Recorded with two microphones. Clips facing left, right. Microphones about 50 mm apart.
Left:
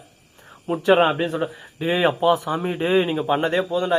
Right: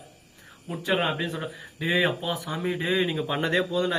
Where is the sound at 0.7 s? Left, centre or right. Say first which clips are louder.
Left 10 dB; left.